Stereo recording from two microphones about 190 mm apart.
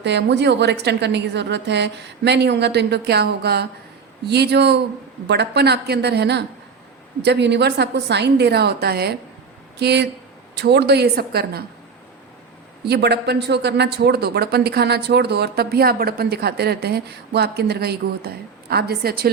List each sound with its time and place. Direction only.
0.0 s a man's voice: 65° right (ahead or behind)
12.8 s a man's voice: 60° right (ahead or behind)